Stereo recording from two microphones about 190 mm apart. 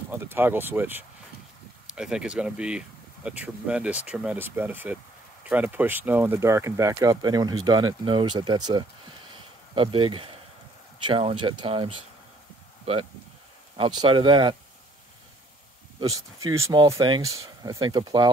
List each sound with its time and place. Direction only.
0.1 s speech: 10° right (ahead or behind); by 11.9 s 25° right (ahead or behind)
13.7 s speech: 25° right (ahead or behind)
16.0 s speech: 20° right (ahead or behind)